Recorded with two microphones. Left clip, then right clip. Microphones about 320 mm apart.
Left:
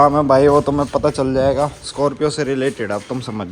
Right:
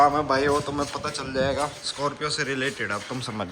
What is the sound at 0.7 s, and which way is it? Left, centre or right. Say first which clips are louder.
Speech: left 10 dB; right.